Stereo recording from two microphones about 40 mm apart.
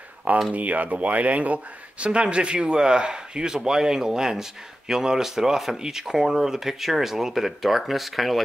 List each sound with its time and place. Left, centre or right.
0.5 s speech: right; by 8.4 s centre